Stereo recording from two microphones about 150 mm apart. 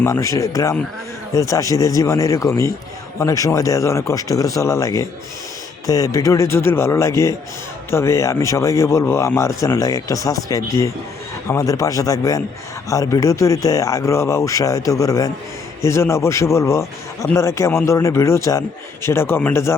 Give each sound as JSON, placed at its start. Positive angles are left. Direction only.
{"t": 0.0, "sound": "a man's voice", "side_deg": 20}